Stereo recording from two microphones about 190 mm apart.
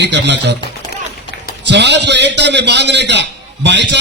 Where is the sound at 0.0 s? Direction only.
65° right (ahead or behind).